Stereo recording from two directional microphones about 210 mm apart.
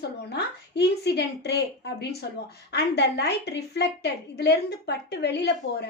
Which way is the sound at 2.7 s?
50° left (ahead or behind).